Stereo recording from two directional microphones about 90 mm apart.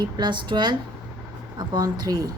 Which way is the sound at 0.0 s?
55° right (ahead or behind).